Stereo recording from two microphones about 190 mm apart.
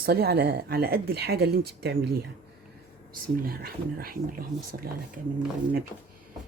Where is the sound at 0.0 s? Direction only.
55° right (ahead or behind).